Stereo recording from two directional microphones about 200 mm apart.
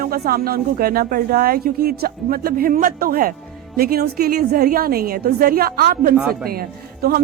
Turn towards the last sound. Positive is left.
turn(degrees=-50)  # may be behind; listen again after turning